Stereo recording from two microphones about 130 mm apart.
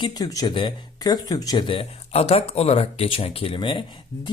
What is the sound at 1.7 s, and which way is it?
Speech, 45° left (ahead or behind).